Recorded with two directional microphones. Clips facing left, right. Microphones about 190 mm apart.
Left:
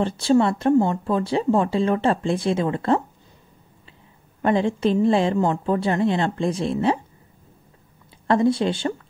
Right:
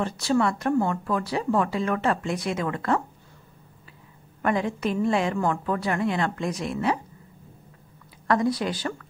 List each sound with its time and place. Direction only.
0.0 s speech: 30° left (ahead or behind)
4.4 s speech: 25° left (ahead or behind)
8.3 s speech: 25° left (ahead or behind)